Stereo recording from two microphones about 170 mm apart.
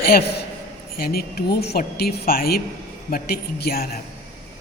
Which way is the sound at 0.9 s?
65° left (ahead or behind).